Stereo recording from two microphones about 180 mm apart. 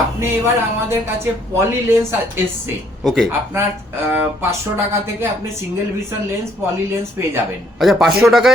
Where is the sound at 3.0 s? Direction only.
Centre (ahead or behind).